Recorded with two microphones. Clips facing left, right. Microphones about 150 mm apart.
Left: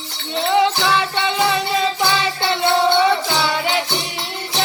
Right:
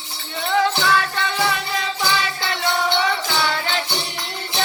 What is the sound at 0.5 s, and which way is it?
Music, 20° left (ahead or behind).